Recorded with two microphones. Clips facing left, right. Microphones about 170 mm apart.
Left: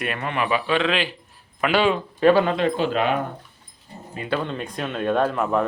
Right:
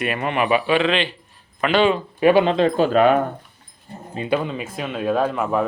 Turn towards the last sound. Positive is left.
turn(degrees=0)  # may be behind; listen again after turning